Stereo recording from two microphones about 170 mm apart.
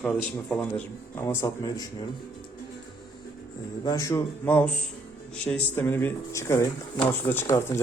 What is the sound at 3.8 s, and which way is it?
Speech, 20° left (ahead or behind).